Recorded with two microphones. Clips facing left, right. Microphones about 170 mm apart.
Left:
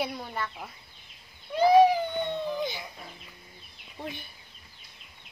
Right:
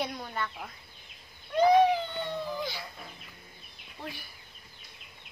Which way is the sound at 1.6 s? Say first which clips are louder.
Left 3 dB; 10° left (ahead or behind).